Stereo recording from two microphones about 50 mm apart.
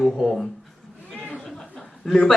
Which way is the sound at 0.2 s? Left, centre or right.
Centre.